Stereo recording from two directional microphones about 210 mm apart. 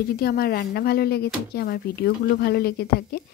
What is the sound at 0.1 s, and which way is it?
A woman's voice, 45° left (ahead or behind).